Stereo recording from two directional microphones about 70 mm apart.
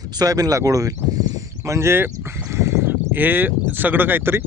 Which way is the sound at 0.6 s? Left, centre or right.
Right.